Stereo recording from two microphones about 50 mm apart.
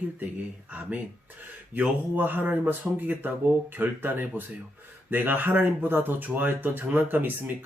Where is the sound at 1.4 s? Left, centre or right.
Right.